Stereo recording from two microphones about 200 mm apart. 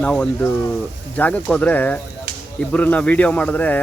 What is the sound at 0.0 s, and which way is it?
A man's voice, 5° left (ahead or behind).